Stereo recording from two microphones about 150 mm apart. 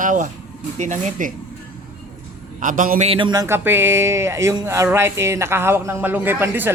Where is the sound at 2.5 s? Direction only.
60° right (ahead or behind).